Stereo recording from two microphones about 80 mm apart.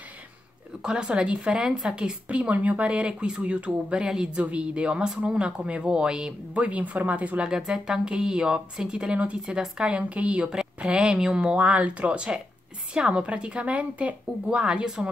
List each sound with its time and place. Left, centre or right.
0.8 s a woman's voice: centre